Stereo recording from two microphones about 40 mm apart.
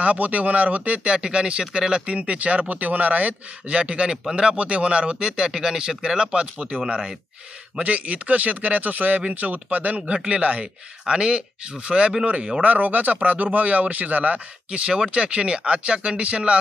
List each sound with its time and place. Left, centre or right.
0.0 s speech: right
2.1 s speech: right
3.7 s speech: right
4.6 s speech: right
7.8 s speech: right
10.1 s speech: right
11.9 s speech: centre
12.6 s speech: right
15.1 s speech: right